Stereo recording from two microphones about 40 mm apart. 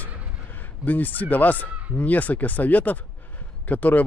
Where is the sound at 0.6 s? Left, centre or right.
Left.